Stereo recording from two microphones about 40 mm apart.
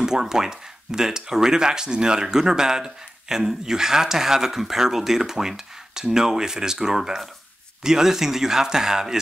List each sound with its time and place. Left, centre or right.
0.0 s speech: centre